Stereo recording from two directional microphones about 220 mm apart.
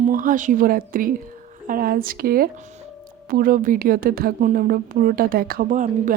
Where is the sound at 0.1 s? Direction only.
35° right (ahead or behind).